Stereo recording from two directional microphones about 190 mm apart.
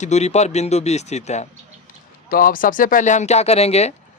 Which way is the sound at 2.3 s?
50° left (ahead or behind).